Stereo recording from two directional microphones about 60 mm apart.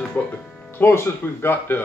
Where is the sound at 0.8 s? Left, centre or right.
Left.